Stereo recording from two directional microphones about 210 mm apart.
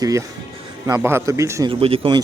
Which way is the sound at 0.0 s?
15° right (ahead or behind).